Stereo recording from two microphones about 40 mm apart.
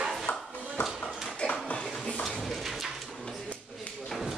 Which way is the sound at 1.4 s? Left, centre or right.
Left.